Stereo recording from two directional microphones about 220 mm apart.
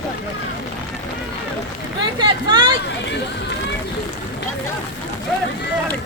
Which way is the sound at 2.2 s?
20° right (ahead or behind).